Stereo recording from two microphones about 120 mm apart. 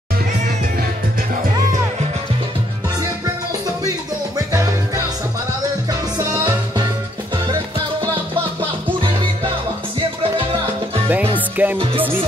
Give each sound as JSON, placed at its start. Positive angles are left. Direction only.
{"t": 4.5, "sound": "music", "side_deg": -30}
{"t": 6.1, "sound": "music", "side_deg": -35}
{"t": 11.1, "sound": "music", "side_deg": -15}